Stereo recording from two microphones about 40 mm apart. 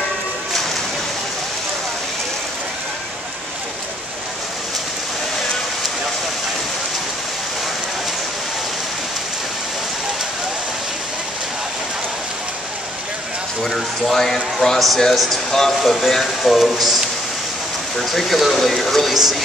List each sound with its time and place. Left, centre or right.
13.7 s speech: centre
17.9 s speech: centre